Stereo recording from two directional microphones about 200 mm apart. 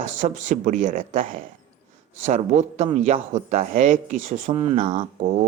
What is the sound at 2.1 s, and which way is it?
Speech, 35° right (ahead or behind).